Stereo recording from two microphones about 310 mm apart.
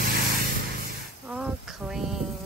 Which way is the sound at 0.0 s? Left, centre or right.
Right.